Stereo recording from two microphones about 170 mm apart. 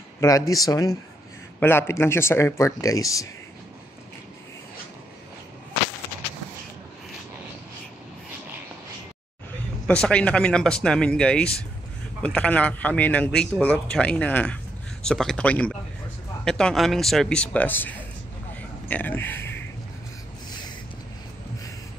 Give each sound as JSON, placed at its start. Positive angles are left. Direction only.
{"t": 0.2, "sound": "a man's voice", "side_deg": 20}
{"t": 9.8, "sound": "a man's voice", "side_deg": 5}